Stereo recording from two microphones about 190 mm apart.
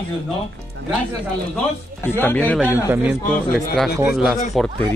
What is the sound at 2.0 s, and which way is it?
Speech, 10° left (ahead or behind).